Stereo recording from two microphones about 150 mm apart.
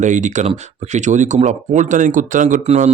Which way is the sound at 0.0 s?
55° right (ahead or behind).